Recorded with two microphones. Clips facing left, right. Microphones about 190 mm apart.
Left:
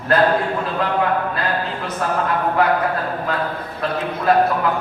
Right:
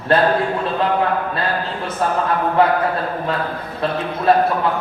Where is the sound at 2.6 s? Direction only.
30° right (ahead or behind).